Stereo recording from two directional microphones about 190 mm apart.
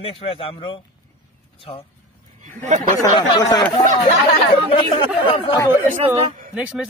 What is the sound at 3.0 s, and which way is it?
Speech, 20° left (ahead or behind).